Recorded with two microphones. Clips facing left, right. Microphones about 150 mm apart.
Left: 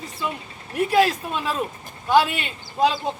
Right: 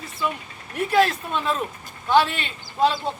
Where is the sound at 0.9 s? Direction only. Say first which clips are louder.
Even; 10° left (ahead or behind).